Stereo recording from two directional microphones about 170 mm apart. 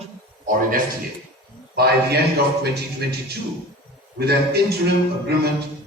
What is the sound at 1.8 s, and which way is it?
A man's voice, 65° right (ahead or behind).